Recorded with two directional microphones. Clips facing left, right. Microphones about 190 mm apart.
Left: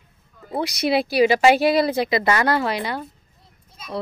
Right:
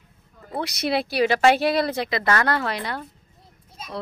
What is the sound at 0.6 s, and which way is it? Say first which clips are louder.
A woman's voice: left 4 dB; centre (ahead or behind).